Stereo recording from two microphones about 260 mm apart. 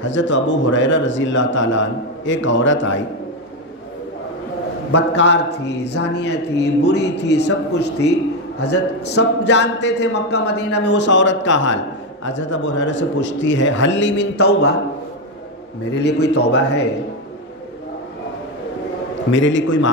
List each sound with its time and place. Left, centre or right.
0.0 s speech: left
4.9 s speech: left
15.9 s speech: left
19.3 s speech: left